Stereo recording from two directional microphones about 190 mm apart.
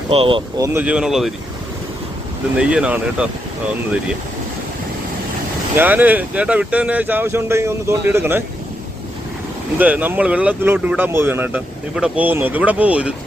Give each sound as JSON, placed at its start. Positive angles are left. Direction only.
{"t": 0.1, "sound": "speech", "side_deg": -30}
{"t": 0.6, "sound": "speech", "side_deg": -10}
{"t": 2.6, "sound": "speech", "side_deg": -5}
{"t": 5.7, "sound": "speech", "side_deg": -10}
{"t": 9.7, "sound": "speech", "side_deg": -10}